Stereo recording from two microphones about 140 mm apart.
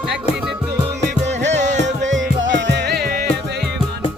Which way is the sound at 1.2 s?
55° right (ahead or behind).